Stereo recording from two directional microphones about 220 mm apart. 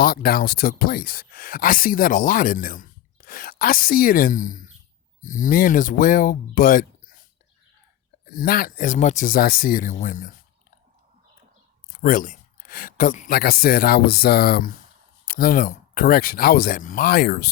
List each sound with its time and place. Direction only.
0.0 s speech: 40° left (ahead or behind)
8.2 s speech: 40° left (ahead or behind)
12.0 s speech: 35° left (ahead or behind)